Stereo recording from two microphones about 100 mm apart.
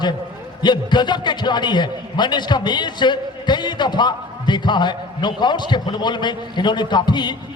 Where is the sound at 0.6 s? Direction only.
50° left (ahead or behind).